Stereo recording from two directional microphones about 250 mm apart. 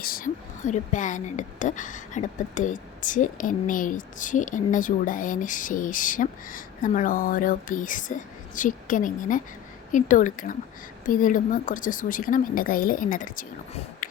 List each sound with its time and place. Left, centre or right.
0.0 s a woman's voice: left